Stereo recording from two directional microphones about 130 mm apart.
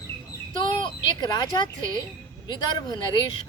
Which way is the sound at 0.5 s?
40° left (ahead or behind).